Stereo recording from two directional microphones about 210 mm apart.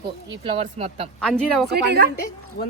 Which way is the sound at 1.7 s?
50° right (ahead or behind).